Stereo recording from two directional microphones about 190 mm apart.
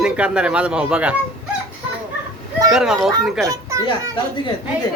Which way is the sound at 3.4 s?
15° right (ahead or behind).